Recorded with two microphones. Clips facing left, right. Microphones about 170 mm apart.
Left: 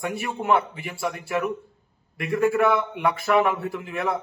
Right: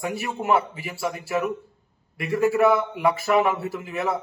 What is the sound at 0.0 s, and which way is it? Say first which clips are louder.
A man's voice: even; centre (ahead or behind).